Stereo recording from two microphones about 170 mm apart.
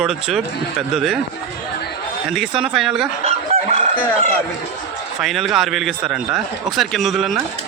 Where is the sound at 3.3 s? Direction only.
40° right (ahead or behind).